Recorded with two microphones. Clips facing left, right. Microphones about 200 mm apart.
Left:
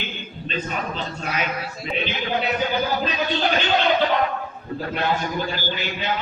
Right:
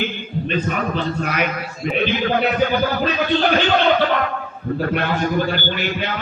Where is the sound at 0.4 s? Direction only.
55° right (ahead or behind).